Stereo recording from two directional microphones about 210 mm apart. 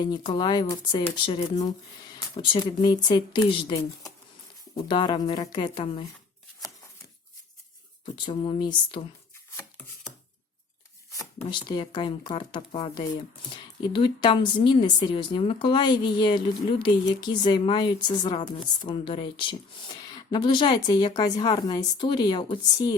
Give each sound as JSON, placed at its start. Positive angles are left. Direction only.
{"t": 0.0, "sound": "speech", "side_deg": 20}
{"t": 8.0, "sound": "speech", "side_deg": 25}
{"t": 11.1, "sound": "speech", "side_deg": 15}